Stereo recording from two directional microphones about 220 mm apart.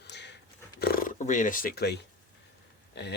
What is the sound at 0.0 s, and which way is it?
Dog, 50° left (ahead or behind).